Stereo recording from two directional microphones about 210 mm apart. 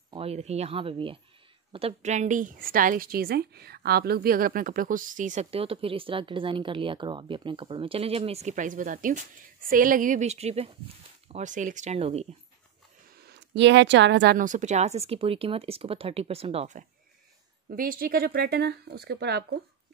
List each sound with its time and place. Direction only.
0.1 s a woman's voice: 30° right (ahead or behind)
13.2 s a woman's voice: 55° right (ahead or behind)
14.4 s speech: 35° right (ahead or behind)
17.6 s speech: 45° right (ahead or behind)